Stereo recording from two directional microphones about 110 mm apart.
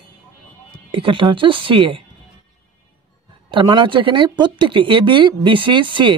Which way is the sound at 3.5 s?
45° right (ahead or behind).